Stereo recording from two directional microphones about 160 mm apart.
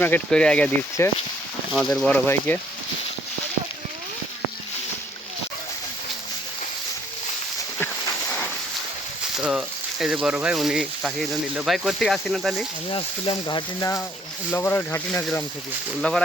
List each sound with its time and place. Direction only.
0.0 s speech: 10° left (ahead or behind)
9.4 s speech: 5° right (ahead or behind)
12.9 s speech: 35° left (ahead or behind)
14.5 s speech: 10° left (ahead or behind)